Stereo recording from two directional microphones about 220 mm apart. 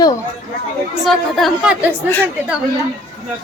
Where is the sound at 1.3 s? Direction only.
Centre (ahead or behind).